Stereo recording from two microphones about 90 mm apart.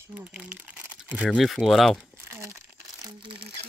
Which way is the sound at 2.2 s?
35° right (ahead or behind).